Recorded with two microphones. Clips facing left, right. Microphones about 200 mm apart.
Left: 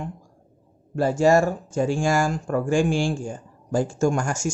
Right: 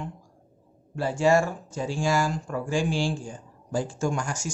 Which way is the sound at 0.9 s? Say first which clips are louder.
Left 4 dB; 45° left (ahead or behind).